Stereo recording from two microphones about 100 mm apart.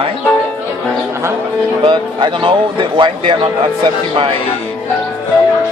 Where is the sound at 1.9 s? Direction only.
55° right (ahead or behind).